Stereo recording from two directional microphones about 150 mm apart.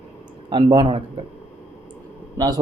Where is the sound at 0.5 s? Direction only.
30° right (ahead or behind).